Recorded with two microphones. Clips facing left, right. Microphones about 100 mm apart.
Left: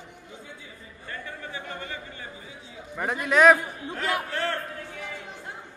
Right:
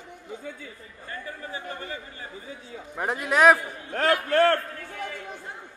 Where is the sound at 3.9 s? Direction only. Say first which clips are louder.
Right 7 dB; 60° right (ahead or behind).